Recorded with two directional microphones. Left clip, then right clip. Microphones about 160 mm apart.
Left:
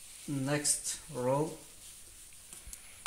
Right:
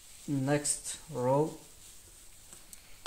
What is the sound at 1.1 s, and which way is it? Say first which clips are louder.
Speech: right 2 dB; 30° right (ahead or behind).